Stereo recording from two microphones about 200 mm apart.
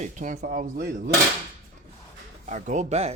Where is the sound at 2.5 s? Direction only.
35° right (ahead or behind).